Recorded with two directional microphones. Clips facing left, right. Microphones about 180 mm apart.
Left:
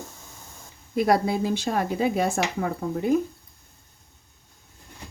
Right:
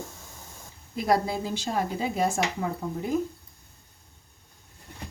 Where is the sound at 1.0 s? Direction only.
65° left (ahead or behind).